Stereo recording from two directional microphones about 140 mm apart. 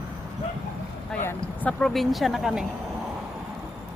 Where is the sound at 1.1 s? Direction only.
15° left (ahead or behind).